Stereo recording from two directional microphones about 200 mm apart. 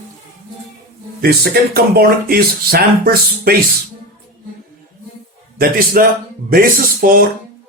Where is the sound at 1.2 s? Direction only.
55° right (ahead or behind).